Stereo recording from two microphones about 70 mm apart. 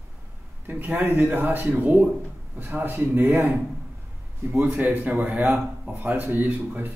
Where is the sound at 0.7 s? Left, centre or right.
Right.